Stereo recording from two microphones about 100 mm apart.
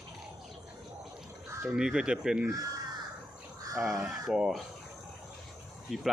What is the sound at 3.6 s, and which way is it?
Crow, 35° right (ahead or behind).